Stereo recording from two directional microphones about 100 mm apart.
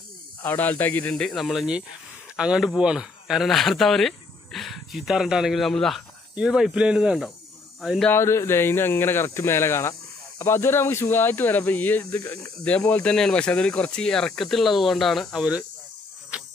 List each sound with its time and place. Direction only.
0.4 s speech: 20° left (ahead or behind)
1.1 s speech: 5° left (ahead or behind)
6.3 s speech: 5° right (ahead or behind)
8.1 s speech: 25° left (ahead or behind)
12.2 s speech: 35° left (ahead or behind)
12.6 s speech: 10° left (ahead or behind)
16.3 s cricket: 10° right (ahead or behind)